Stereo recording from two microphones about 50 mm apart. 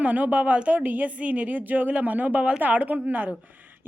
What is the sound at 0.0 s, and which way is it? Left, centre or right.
A woman's voice, right.